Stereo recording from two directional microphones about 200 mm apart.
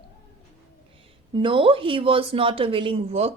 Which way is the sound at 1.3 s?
25° right (ahead or behind).